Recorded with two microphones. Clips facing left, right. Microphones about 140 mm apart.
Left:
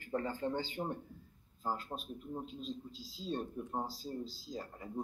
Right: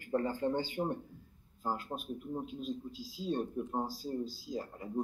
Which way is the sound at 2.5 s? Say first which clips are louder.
Right 4 dB; 50° right (ahead or behind).